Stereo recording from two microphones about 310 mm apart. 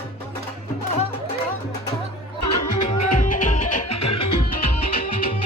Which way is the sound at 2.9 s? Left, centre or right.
Left.